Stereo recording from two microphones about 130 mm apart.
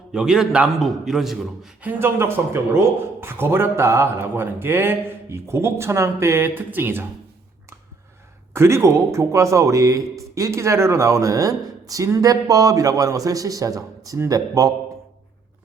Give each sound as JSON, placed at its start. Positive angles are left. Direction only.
{"t": 0.1, "sound": "a man's voice", "side_deg": -5}
{"t": 8.5, "sound": "a man's voice", "side_deg": -20}